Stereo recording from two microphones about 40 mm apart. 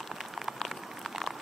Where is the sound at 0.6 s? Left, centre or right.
Centre.